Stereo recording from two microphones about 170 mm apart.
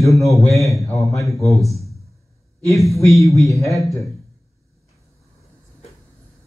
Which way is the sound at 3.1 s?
20° left (ahead or behind).